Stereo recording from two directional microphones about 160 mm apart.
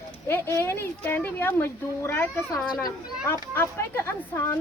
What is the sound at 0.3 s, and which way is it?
Speech, 15° left (ahead or behind).